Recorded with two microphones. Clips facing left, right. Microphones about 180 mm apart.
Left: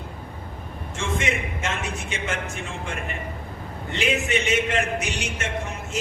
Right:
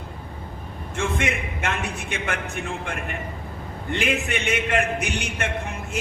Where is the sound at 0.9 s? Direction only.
60° right (ahead or behind).